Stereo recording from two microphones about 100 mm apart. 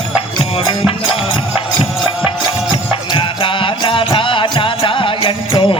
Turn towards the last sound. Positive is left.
turn(degrees=60)  # may be behind; listen again after turning